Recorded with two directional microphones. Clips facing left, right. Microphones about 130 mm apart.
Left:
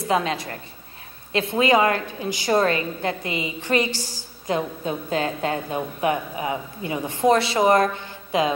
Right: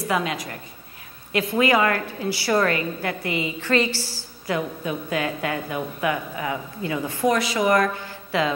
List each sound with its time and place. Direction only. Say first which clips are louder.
0.0 s a woman's voice: left 2 dB; 30° left (ahead or behind)
4.6 s a woman's voice: even; 30° left (ahead or behind)